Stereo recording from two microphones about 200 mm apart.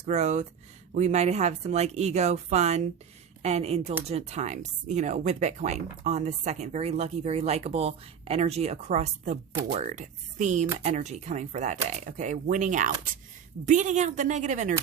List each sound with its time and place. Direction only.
0.0 s speech: 35° right (ahead or behind)